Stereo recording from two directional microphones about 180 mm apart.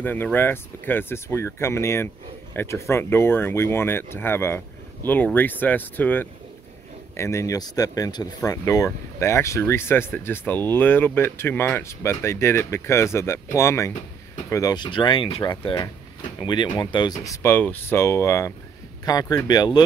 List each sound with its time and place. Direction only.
0.0 s speech: 10° left (ahead or behind)